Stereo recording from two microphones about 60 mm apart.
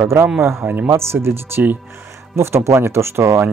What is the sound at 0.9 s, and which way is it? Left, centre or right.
Speech, right.